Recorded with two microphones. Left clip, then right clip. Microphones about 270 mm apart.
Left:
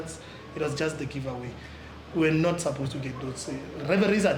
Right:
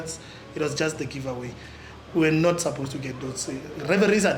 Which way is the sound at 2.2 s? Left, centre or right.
Right.